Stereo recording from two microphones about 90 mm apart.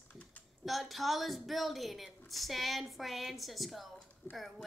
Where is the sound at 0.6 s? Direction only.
Centre (ahead or behind).